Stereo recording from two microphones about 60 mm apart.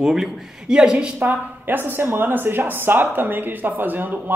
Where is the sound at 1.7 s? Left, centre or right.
Right.